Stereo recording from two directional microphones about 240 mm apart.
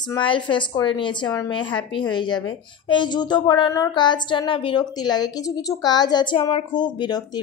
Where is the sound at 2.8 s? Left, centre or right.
Centre.